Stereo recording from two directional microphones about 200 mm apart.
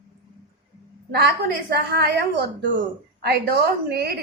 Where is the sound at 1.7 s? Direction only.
55° right (ahead or behind).